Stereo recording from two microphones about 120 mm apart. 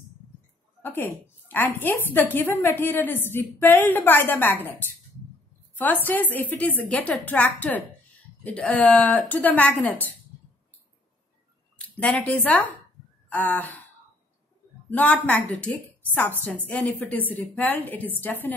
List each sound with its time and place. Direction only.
0.8 s a woman's voice: 15° left (ahead or behind)
6.0 s a woman's voice: 15° left (ahead or behind)
12.0 s a woman's voice: 10° left (ahead or behind)
14.9 s a woman's voice: 10° left (ahead or behind)